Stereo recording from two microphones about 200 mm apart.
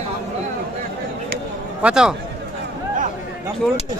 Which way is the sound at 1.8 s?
5° right (ahead or behind).